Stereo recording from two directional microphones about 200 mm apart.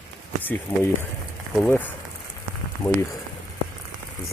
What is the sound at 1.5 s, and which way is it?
Speech, 10° left (ahead or behind).